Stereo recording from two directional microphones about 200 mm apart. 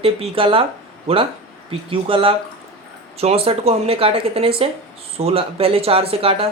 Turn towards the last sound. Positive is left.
turn(degrees=-30)  # may be behind; listen again after turning